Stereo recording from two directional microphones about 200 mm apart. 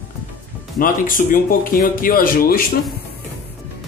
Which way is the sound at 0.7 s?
45° left (ahead or behind).